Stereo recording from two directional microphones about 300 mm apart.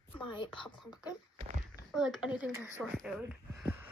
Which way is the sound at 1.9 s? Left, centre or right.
Centre.